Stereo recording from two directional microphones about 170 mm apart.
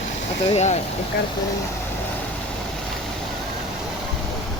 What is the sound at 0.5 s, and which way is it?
Speech, 40° left (ahead or behind).